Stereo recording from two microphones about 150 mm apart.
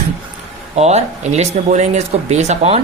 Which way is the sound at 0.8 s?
45° right (ahead or behind).